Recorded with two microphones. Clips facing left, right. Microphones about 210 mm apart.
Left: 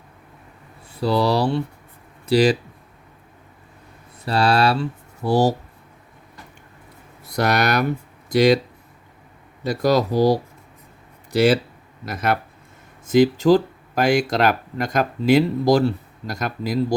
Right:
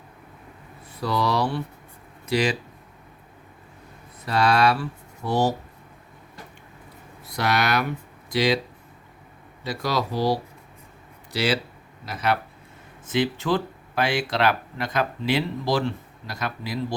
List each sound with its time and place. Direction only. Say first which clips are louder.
0.9 s speech: left 5 dB; 30° left (ahead or behind)
4.3 s speech: left 2 dB; 30° left (ahead or behind)
7.3 s speech: left 4 dB; 45° left (ahead or behind)
9.6 s speech: left 8 dB; 45° left (ahead or behind)
11.3 s speech: left 8 dB; 50° left (ahead or behind)